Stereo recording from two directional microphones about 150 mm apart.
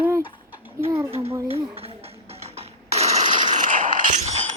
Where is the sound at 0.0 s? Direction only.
15° right (ahead or behind).